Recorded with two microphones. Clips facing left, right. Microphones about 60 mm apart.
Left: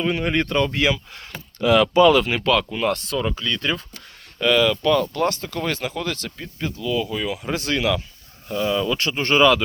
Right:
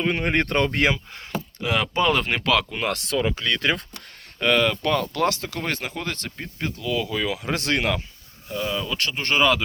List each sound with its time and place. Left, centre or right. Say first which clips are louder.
0.0 s speech: left 1 dB; right
1.6 s speech: left 8 dB; right
2.3 s speech: left 2 dB; right
4.4 s speech: left 2 dB; right
5.1 s speech: left 1 dB; right
5.5 s speech: left 3 dB; right
6.0 s speech: left 3 dB; right
6.6 s speech: left 2 dB; right
8.4 s speech: left 5 dB; centre